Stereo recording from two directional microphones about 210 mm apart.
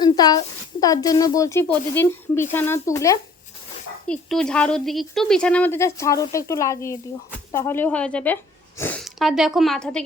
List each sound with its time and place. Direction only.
0.0 s a sound: 20° left (ahead or behind)
0.8 s speech: 15° left (ahead or behind)
4.0 s speech: 5° left (ahead or behind)